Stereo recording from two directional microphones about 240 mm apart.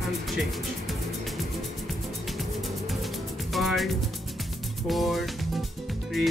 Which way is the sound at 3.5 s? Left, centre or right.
Centre.